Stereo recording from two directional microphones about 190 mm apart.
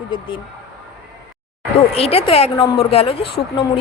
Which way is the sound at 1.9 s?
30° left (ahead or behind).